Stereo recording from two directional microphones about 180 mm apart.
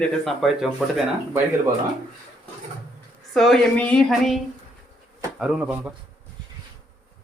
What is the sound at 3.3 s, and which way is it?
Speech, centre (ahead or behind).